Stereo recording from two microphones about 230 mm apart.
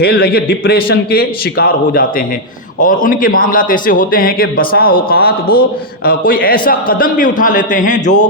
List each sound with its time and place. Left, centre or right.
0.0 s a man's voice: left